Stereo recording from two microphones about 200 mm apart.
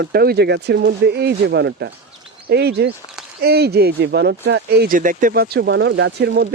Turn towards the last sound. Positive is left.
turn(degrees=-50)  # may be behind; listen again after turning